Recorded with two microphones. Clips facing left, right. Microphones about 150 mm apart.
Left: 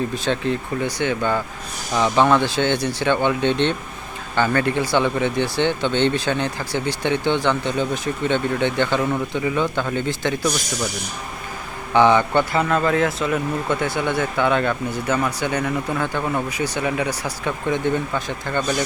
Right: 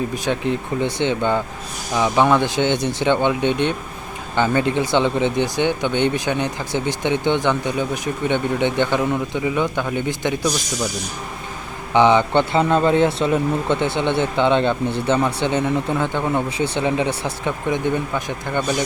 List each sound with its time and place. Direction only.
0.1 s speech: 15° right (ahead or behind)
11.9 s speech: 20° right (ahead or behind)